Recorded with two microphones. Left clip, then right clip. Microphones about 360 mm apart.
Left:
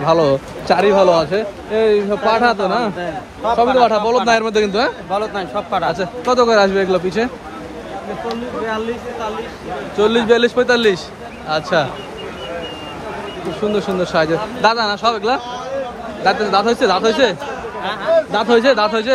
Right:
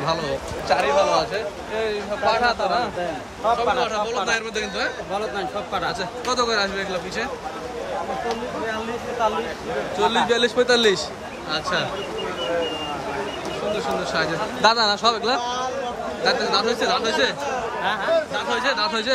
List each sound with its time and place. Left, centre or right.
0.0 s a man's voice: centre; by 3.7 s left
3.8 s a man's voice: centre
5.9 s a man's voice: centre
9.9 s a man's voice: centre
13.7 s a man's voice: centre